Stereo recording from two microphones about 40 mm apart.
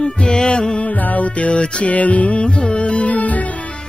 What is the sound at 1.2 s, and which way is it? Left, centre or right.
Music, left.